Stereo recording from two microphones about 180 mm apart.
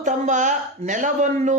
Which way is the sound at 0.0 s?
45° right (ahead or behind).